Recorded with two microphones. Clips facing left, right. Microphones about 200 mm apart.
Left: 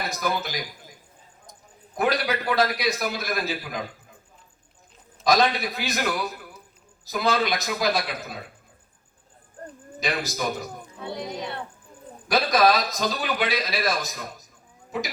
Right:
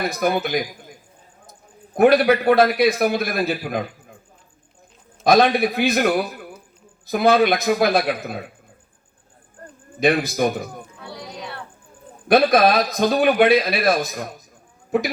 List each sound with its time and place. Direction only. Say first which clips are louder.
0.1 s a man's voice: right 7 dB; 60° right (ahead or behind)
2.0 s a man's voice: right 10 dB; 55° right (ahead or behind)
5.2 s a man's voice: right 6 dB; 55° right (ahead or behind)
10.0 s a man's voice: right 10 dB; 55° right (ahead or behind)
11.0 s a sound: left 5 dB; 20° left (ahead or behind)
12.3 s a man's voice: right 5 dB; 55° right (ahead or behind)